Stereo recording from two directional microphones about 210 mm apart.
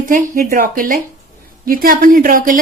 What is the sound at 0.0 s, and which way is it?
Speech, 40° right (ahead or behind).